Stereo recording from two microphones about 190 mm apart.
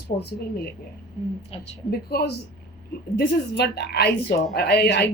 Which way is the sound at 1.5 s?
30° left (ahead or behind).